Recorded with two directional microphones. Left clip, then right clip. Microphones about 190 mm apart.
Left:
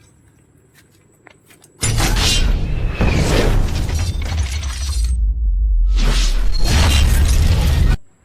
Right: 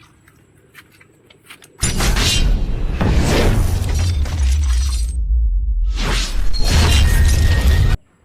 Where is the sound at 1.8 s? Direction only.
Centre (ahead or behind).